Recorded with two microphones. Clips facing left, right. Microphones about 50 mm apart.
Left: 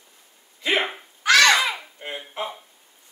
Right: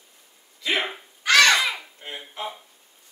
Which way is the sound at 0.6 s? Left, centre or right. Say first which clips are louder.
Left 2 dB; left.